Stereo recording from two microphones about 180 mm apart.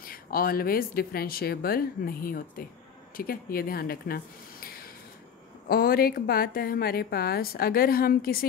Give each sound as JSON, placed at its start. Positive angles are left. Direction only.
{"t": 0.0, "sound": "a woman's voice", "side_deg": 55}